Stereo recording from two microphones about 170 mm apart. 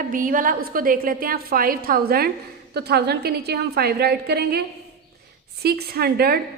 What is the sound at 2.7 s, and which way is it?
A woman's voice, 70° right (ahead or behind).